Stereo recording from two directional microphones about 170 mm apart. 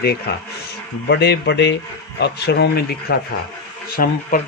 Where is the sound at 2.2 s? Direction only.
75° left (ahead or behind).